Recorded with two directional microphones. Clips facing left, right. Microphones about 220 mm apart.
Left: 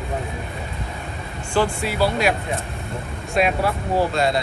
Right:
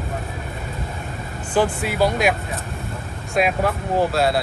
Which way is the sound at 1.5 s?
15° right (ahead or behind).